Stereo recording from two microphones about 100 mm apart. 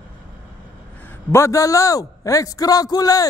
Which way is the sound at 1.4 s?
35° left (ahead or behind).